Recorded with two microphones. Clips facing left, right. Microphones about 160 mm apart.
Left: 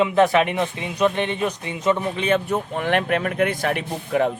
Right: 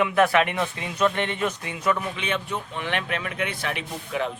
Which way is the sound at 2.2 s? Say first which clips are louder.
Left 8 dB; 40° left (ahead or behind).